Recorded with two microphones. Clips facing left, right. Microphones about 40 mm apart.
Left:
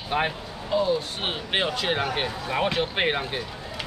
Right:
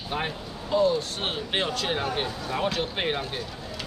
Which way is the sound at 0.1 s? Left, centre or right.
Left.